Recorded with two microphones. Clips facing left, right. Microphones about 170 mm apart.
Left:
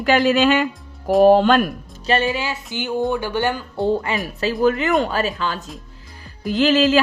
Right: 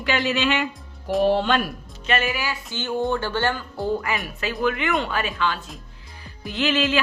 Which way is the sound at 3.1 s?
15° left (ahead or behind).